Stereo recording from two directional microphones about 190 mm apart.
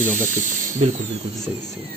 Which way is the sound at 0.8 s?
35° right (ahead or behind).